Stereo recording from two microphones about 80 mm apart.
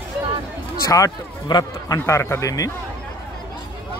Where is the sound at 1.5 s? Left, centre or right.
Left.